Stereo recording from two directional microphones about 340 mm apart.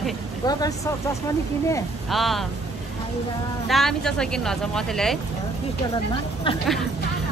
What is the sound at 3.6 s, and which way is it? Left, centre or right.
Speech, centre.